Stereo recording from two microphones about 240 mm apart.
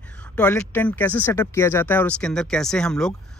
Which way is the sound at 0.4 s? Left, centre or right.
Centre.